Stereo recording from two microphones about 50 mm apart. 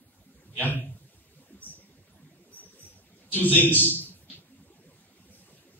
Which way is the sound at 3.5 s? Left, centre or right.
Left.